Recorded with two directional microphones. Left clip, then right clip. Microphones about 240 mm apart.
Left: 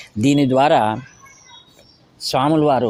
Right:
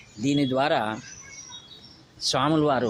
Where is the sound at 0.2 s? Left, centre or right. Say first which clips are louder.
Left 9 dB; left.